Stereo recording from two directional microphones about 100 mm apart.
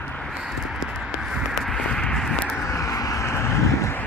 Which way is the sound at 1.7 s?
10° left (ahead or behind).